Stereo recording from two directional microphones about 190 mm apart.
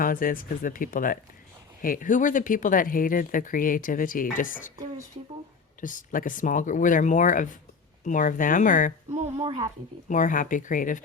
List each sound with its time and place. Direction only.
0.0 s speech: 45° left (ahead or behind)
5.8 s speech: 45° left (ahead or behind)
9.3 s speech: 25° right (ahead or behind)
10.1 s speech: 45° left (ahead or behind)